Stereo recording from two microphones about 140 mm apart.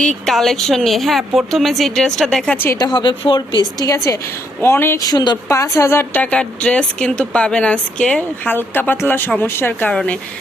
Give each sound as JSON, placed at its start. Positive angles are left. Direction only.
{"t": 0.3, "sound": "a woman's voice", "side_deg": 0}
{"t": 2.6, "sound": "a woman's voice", "side_deg": 20}
{"t": 5.0, "sound": "speech", "side_deg": 30}
{"t": 9.9, "sound": "a woman's voice", "side_deg": 5}